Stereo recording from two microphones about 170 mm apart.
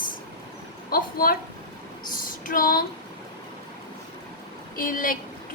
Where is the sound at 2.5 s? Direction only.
55° left (ahead or behind).